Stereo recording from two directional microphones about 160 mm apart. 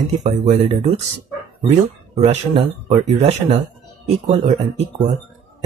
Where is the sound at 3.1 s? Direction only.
40° right (ahead or behind).